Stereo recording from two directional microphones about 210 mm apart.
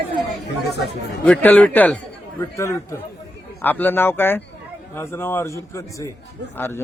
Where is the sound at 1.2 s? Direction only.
5° left (ahead or behind).